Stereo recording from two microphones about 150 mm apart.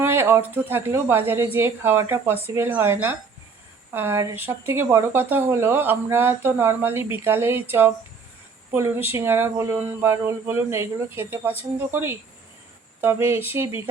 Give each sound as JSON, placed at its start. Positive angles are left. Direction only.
{"t": 0.0, "sound": "speech", "side_deg": -15}